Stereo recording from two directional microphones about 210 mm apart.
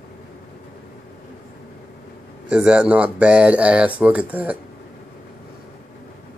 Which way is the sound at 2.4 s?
5° right (ahead or behind).